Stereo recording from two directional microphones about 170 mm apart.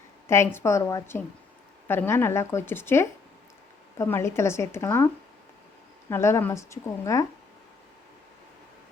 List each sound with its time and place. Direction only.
0.3 s a woman's voice: 15° left (ahead or behind)